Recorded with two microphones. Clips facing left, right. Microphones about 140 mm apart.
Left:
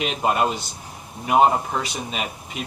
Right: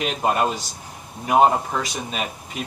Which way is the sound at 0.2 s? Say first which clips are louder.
Even; 40° right (ahead or behind).